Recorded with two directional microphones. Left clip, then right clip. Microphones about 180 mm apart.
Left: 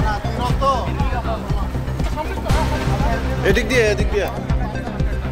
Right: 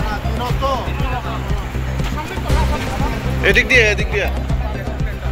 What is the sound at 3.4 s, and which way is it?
Speech, 30° left (ahead or behind).